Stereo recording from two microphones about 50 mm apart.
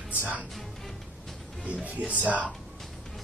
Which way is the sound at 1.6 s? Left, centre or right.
Right.